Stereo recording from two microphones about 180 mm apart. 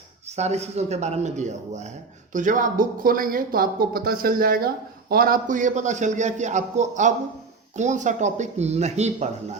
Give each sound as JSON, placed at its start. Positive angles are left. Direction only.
{"t": 0.3, "sound": "speech", "side_deg": -35}